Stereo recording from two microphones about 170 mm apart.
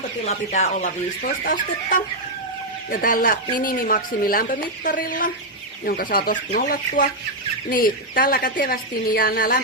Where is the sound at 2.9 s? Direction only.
55° left (ahead or behind).